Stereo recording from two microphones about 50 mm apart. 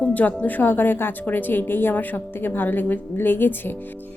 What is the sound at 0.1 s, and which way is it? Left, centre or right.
A woman's voice, left.